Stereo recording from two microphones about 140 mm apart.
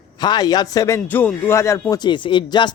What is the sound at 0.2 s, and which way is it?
A man's voice, 30° left (ahead or behind).